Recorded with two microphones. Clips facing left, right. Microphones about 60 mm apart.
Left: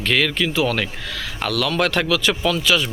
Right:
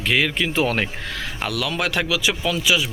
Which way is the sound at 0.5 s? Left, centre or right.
Right.